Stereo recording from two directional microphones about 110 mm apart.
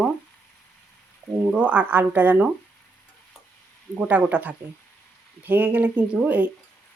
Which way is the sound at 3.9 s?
15° right (ahead or behind).